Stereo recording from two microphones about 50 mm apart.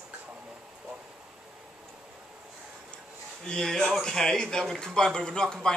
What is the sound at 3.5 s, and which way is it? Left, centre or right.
Speech, centre.